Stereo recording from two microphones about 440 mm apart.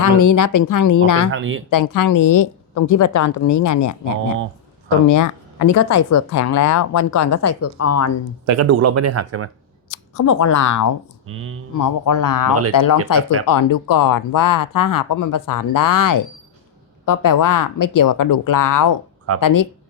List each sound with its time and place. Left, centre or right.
0.0 s speech: left
1.3 s speech: right
1.7 s speech: left
5.0 s speech: left
8.4 s speech: right
9.9 s speech: left
11.3 s speech: right
11.7 s speech: left